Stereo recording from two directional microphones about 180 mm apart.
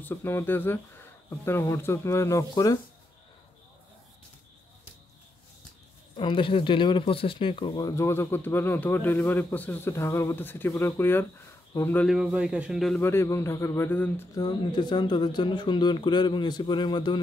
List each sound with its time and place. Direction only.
0.0 s speech: 10° left (ahead or behind)
6.1 s speech: 30° left (ahead or behind); by 12.1 s 10° left (ahead or behind)
12.1 s a man's voice: 5° right (ahead or behind)
13.0 s speech: 15° left (ahead or behind)
14.3 s speech: 25° left (ahead or behind)